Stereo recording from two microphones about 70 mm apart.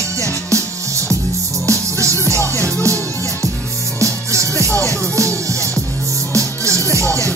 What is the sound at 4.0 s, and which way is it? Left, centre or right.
Music, right.